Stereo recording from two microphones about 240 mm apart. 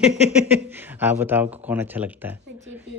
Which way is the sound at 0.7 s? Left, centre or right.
Centre.